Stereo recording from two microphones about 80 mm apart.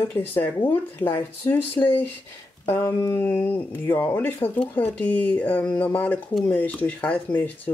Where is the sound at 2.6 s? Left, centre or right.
Left.